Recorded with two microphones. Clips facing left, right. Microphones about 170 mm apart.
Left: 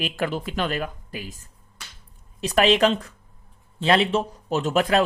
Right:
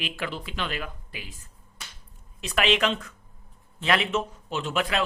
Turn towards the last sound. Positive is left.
turn(degrees=40)  # may be behind; listen again after turning